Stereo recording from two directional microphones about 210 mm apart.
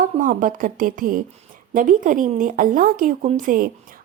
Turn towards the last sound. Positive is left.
turn(degrees=-40)  # may be behind; listen again after turning